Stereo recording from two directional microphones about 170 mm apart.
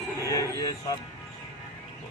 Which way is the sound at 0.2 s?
20° left (ahead or behind).